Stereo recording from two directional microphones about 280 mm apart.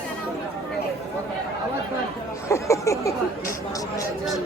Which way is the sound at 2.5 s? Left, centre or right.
Centre.